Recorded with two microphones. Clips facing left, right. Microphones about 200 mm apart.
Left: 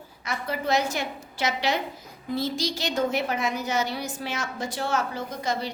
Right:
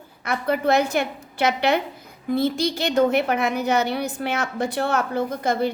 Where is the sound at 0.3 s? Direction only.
55° right (ahead or behind).